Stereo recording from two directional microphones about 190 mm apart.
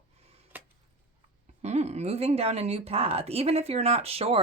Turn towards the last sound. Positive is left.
turn(degrees=-30)  # may be behind; listen again after turning